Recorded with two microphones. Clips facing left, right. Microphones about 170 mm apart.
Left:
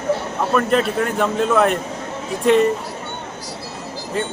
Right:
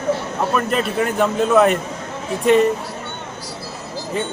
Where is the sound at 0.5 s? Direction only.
5° right (ahead or behind).